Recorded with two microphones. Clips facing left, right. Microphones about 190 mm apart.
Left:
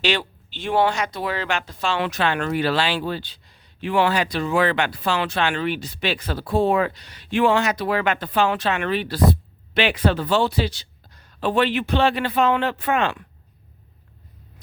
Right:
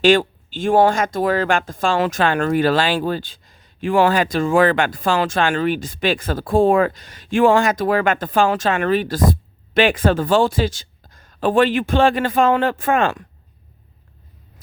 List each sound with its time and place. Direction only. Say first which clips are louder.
0.0 s speech: right 10 dB; 45° right (ahead or behind)